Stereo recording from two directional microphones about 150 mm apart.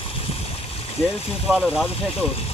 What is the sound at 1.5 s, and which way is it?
Speech, 5° right (ahead or behind).